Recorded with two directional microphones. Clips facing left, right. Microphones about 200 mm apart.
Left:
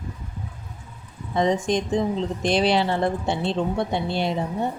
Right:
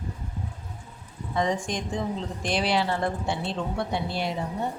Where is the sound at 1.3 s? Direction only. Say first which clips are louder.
Left 6 dB; 25° left (ahead or behind).